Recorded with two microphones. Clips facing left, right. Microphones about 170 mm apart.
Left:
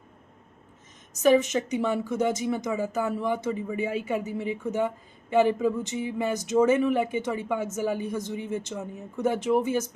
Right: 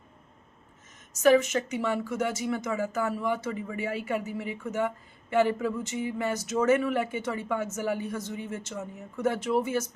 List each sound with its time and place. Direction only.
1.2 s speech: 15° left (ahead or behind)